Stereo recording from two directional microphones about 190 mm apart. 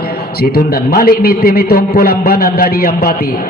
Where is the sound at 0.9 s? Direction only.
50° left (ahead or behind).